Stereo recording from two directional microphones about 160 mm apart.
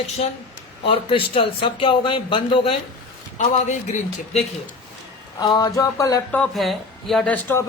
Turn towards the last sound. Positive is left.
turn(degrees=10)  # may be behind; listen again after turning